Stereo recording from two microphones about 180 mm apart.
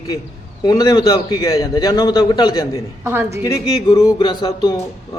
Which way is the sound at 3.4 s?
20° left (ahead or behind).